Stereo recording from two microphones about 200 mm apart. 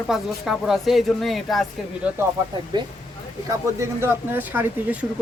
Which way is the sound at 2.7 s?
20° right (ahead or behind).